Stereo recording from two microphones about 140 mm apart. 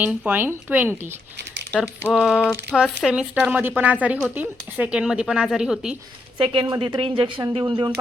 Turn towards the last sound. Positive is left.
turn(degrees=-35)  # may be behind; listen again after turning